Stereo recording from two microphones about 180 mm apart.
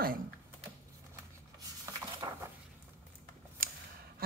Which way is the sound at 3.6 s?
55° right (ahead or behind).